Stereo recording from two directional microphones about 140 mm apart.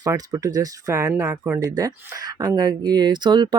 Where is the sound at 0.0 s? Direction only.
20° right (ahead or behind).